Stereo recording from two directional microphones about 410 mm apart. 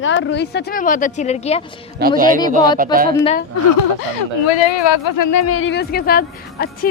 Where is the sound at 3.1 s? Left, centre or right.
Centre.